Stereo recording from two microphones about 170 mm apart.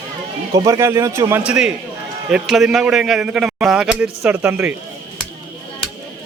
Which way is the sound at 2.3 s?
5° right (ahead or behind).